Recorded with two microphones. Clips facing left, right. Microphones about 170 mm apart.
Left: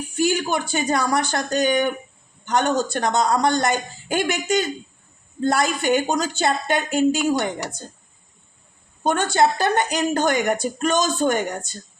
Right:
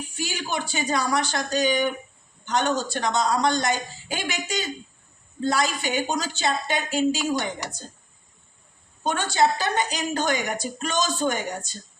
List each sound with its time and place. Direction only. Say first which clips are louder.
0.2 s a woman's voice: left 9 dB; 50° left (ahead or behind)
9.0 s a woman's voice: left 3 dB; 50° left (ahead or behind)